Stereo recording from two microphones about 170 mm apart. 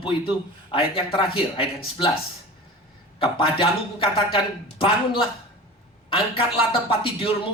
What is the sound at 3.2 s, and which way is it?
Speech, 30° left (ahead or behind).